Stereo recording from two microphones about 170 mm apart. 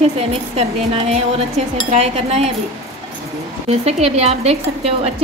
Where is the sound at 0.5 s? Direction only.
40° right (ahead or behind).